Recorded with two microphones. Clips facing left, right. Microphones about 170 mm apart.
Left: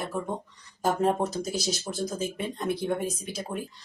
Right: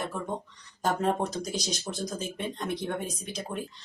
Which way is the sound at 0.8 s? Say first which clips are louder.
Left 2 dB; 5° left (ahead or behind).